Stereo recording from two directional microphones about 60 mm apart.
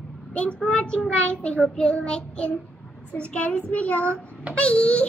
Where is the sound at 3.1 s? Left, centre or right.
Centre.